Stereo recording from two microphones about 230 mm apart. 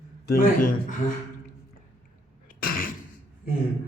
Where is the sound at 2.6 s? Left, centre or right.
Left.